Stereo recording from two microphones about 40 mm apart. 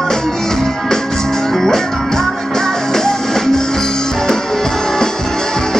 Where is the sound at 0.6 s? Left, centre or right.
Centre.